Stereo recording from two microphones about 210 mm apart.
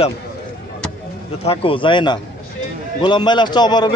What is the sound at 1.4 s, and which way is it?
A man's voice, 25° left (ahead or behind).